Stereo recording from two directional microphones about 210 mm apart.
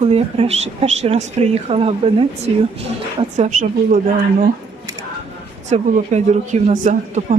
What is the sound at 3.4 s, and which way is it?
Speech, 40° right (ahead or behind).